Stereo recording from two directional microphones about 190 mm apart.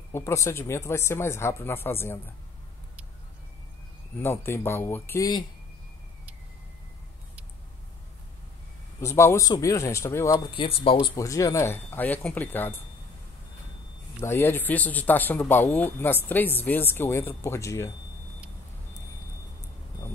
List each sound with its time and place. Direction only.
0.1 s speech: 15° left (ahead or behind)
4.2 s speech: 10° left (ahead or behind)
9.0 s speech: 15° left (ahead or behind)
10.6 s speech: 30° left (ahead or behind); by 12.8 s 10° left (ahead or behind)
14.2 s speech: 10° left (ahead or behind)